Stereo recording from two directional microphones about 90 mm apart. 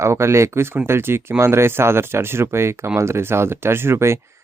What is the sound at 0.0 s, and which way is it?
Speech, 30° right (ahead or behind).